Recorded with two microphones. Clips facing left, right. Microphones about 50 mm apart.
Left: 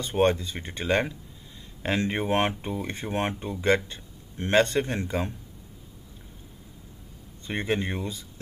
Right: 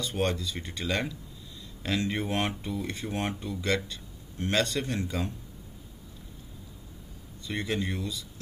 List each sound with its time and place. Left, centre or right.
0.0 s speech: left
7.4 s speech: left